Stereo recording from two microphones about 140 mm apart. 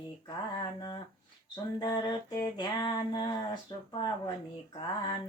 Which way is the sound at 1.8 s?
30° left (ahead or behind).